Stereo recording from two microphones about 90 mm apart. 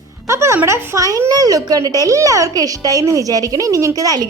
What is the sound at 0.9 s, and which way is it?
A woman's voice, 40° right (ahead or behind).